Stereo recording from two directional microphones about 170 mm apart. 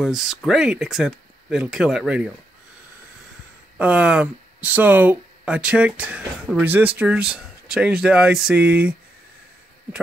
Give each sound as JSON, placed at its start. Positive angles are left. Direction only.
{"t": 0.0, "sound": "speech", "side_deg": 0}
{"t": 3.7, "sound": "speech", "side_deg": -10}